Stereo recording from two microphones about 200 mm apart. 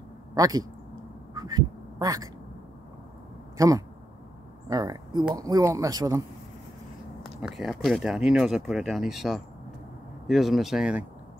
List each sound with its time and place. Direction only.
0.3 s speech: 20° right (ahead or behind)
1.3 s quack: 20° right (ahead or behind)
3.5 s speech: 15° right (ahead or behind)
7.4 s speech: centre (ahead or behind)